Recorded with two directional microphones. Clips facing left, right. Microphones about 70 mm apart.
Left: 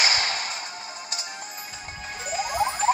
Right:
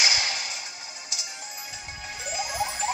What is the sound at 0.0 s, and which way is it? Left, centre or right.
Music, left.